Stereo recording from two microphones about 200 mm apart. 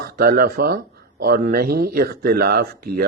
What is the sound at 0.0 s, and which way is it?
Speech, 45° right (ahead or behind).